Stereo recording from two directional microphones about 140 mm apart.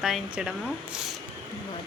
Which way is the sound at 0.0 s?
5° right (ahead or behind).